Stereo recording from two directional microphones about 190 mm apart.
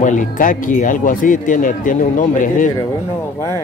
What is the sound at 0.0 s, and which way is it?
Speech, 40° left (ahead or behind).